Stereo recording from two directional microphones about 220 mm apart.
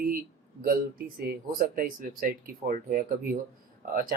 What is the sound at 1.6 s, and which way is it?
Speech, 40° right (ahead or behind).